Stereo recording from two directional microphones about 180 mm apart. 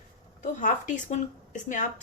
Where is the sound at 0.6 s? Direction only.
45° left (ahead or behind).